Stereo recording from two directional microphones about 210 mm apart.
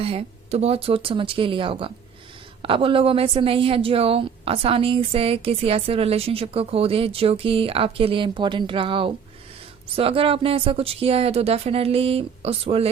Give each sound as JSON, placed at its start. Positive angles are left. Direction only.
{"t": 0.0, "sound": "a woman's voice", "side_deg": -25}